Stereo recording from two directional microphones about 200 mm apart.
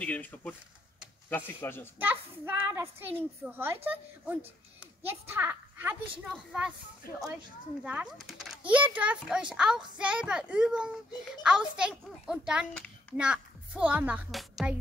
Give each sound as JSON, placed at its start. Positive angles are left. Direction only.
{"t": 0.0, "sound": "speech", "side_deg": 10}
{"t": 2.0, "sound": "a child's voice", "side_deg": -10}
{"t": 7.0, "sound": "speech", "side_deg": 50}
{"t": 7.8, "sound": "a child's voice", "side_deg": -5}